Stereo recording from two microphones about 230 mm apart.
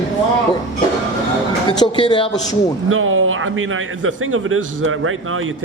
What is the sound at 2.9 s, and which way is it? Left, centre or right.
A man's voice, right.